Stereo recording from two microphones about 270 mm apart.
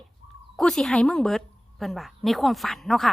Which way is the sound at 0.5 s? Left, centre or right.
Centre.